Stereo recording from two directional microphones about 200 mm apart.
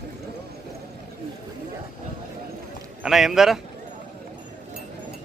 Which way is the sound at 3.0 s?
Centre (ahead or behind).